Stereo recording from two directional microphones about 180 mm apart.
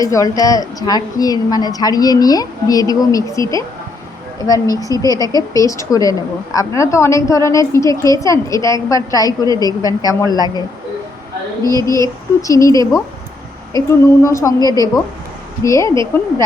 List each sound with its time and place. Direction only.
0.0 s a woman's voice: 20° left (ahead or behind)
4.4 s a woman's voice: 20° left (ahead or behind)
11.6 s a woman's voice: 15° left (ahead or behind)